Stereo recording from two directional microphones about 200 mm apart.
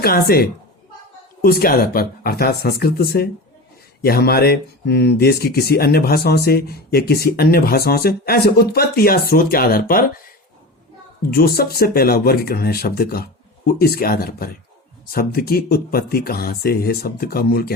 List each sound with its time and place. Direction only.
0.0 s speech: 50° left (ahead or behind)
11.3 s speech: 50° left (ahead or behind)